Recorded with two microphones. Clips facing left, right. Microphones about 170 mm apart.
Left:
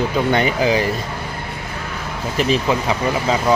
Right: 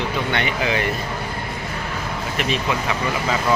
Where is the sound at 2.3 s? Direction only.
35° left (ahead or behind).